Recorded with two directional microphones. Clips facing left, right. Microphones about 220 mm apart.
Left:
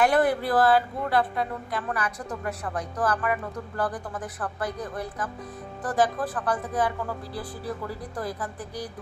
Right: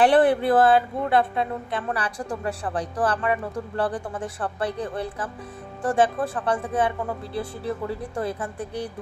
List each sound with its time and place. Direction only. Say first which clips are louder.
0.0 s speech: right 4 dB; 30° right (ahead or behind)